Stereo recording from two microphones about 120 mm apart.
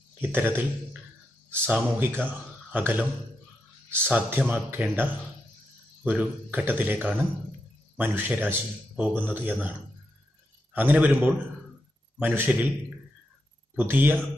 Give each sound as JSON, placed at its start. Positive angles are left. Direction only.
{"t": 0.2, "sound": "a man's voice", "side_deg": -15}
{"t": 4.1, "sound": "a man's voice", "side_deg": -15}
{"t": 6.0, "sound": "a man's voice", "side_deg": -15}
{"t": 13.7, "sound": "a man's voice", "side_deg": -15}